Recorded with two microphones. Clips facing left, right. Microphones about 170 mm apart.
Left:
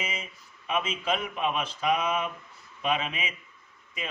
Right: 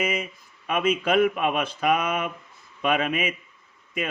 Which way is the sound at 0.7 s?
55° right (ahead or behind).